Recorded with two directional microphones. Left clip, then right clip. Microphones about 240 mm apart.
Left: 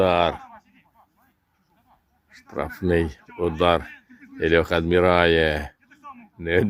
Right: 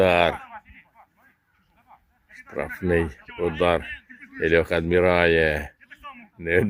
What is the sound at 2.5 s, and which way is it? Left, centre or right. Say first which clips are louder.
Speech: left 1 dB; centre.